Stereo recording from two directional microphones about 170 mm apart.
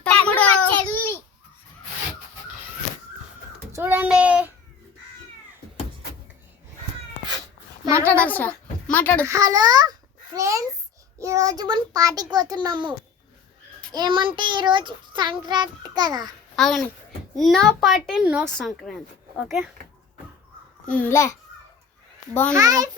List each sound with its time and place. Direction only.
0.0 s a sound: 10° left (ahead or behind)
3.7 s child singing: 15° right (ahead or behind)
8.0 s a sound: 10° left (ahead or behind)
9.2 s a child's voice: 20° right (ahead or behind)
13.9 s a child's voice: 25° right (ahead or behind)
16.6 s a child's voice: centre (ahead or behind)
20.9 s a child's voice: 15° left (ahead or behind)
22.5 s a child's voice: 20° right (ahead or behind)